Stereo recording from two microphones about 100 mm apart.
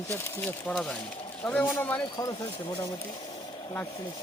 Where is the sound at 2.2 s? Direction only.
40° left (ahead or behind).